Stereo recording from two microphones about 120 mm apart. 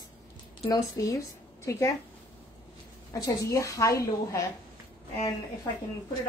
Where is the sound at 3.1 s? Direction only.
25° left (ahead or behind).